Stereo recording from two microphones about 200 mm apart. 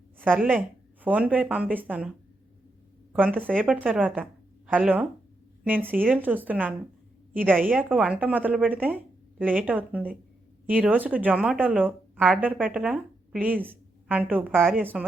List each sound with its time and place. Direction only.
0.2 s a woman's voice: 10° right (ahead or behind)
3.1 s a woman's voice: 5° right (ahead or behind)